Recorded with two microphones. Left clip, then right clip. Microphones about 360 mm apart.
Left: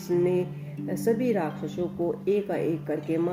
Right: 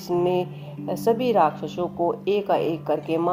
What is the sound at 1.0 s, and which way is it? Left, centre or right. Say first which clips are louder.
Speech: right 7 dB; right.